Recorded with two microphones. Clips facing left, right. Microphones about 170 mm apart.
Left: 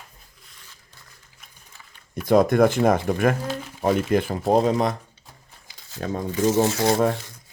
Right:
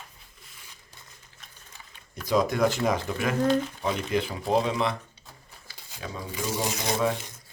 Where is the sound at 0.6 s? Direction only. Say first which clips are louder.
Even; 15° right (ahead or behind).